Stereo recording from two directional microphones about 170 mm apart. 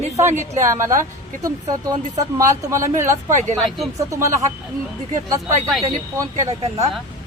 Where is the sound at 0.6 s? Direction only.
15° right (ahead or behind).